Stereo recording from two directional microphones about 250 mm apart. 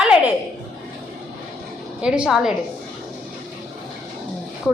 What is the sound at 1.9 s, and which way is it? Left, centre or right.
Speech, centre.